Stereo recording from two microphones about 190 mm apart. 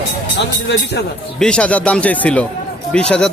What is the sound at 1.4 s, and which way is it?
A man's voice, 5° left (ahead or behind).